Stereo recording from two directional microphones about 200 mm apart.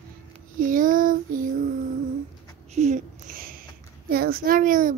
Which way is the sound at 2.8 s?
40° right (ahead or behind).